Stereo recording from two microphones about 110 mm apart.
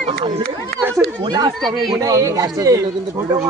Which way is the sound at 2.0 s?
30° right (ahead or behind).